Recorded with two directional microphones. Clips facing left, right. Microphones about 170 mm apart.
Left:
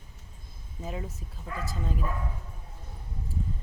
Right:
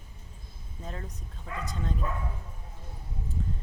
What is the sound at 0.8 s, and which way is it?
Speech, 5° left (ahead or behind).